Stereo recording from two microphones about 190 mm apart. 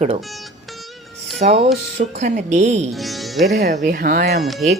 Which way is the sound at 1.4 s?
35° right (ahead or behind).